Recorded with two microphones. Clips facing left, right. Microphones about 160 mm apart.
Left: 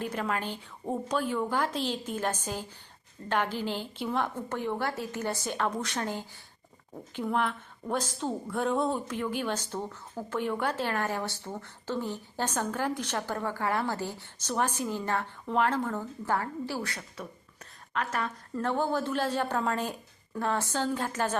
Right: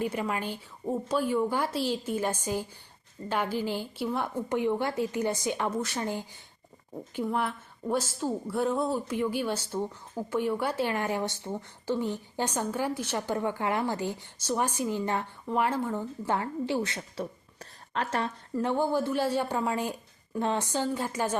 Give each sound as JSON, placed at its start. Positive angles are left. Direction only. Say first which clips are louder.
{"t": 0.0, "sound": "a woman's voice", "louder": "right 1 dB", "side_deg": -10}
{"t": 18.5, "sound": "speech", "louder": "right 2 dB", "side_deg": -15}